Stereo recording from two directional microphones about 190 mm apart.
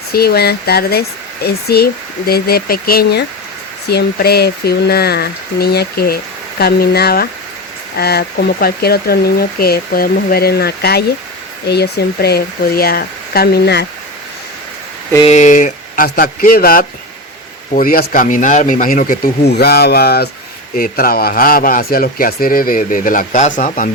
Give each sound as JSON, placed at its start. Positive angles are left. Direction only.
{"t": 0.1, "sound": "speech", "side_deg": 55}
{"t": 15.3, "sound": "a man's voice", "side_deg": 40}
{"t": 19.5, "sound": "a man's voice", "side_deg": 60}